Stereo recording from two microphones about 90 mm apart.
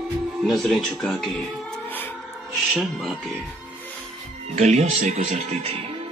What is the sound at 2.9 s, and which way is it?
Speech, centre (ahead or behind).